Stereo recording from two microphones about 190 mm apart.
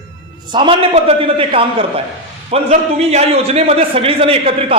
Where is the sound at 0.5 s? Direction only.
25° right (ahead or behind).